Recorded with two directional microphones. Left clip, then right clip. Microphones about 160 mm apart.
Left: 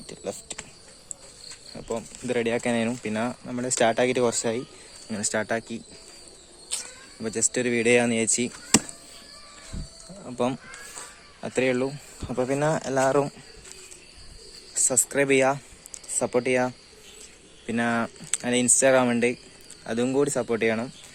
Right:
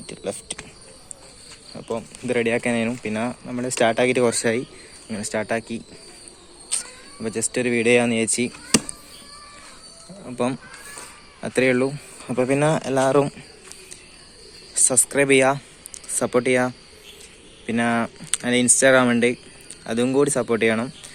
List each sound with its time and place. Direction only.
0.0 s a sound: 10° left (ahead or behind)
1.7 s speech: 25° left (ahead or behind); by 4.6 s 10° left (ahead or behind)
5.1 s speech: 30° left (ahead or behind)
10.2 s speech: 20° left (ahead or behind)
11.3 s speech: 10° left (ahead or behind)
14.8 s speech: 15° left (ahead or behind)